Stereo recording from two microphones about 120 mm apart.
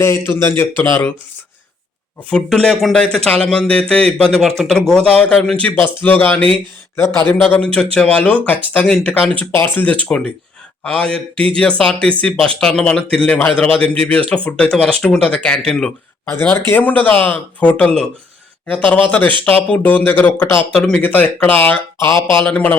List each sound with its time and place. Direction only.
0.0 s speech: 25° left (ahead or behind)
2.3 s speech: 5° left (ahead or behind)
9.6 s speech: 15° left (ahead or behind)
16.3 s speech: 15° left (ahead or behind)